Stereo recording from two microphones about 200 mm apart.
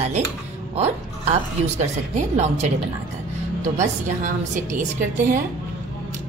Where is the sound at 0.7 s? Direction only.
30° right (ahead or behind).